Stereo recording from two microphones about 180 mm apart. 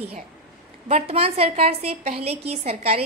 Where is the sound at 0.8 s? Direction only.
35° right (ahead or behind).